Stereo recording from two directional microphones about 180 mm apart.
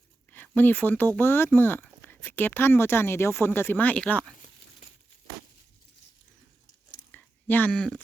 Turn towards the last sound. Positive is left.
turn(degrees=5)  # may be behind; listen again after turning